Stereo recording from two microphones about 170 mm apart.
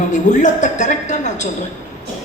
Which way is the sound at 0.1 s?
45° left (ahead or behind).